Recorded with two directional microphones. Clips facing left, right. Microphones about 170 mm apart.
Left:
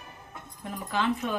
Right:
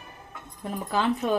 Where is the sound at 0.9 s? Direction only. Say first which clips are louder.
Right 4 dB; 35° right (ahead or behind).